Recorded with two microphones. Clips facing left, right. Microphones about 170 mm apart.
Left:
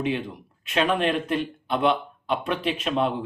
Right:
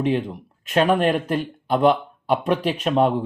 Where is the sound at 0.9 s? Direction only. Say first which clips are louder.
Right 3 dB; 40° right (ahead or behind).